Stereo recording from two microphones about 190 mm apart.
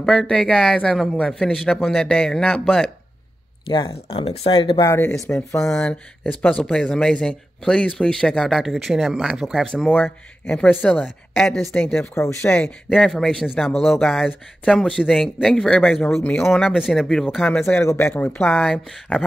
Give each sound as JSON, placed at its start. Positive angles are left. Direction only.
{"t": 0.0, "sound": "speech", "side_deg": 0}
{"t": 3.6, "sound": "speech", "side_deg": 25}
{"t": 5.3, "sound": "speech", "side_deg": 15}